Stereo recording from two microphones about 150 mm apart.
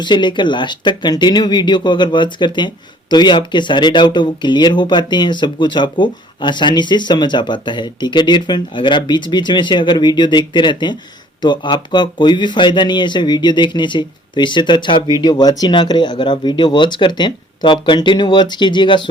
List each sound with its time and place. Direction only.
0.0 s speech: 30° left (ahead or behind)